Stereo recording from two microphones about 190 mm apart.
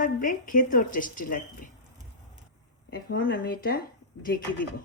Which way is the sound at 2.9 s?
55° left (ahead or behind).